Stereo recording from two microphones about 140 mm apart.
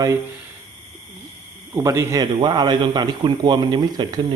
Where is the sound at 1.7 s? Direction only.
20° right (ahead or behind).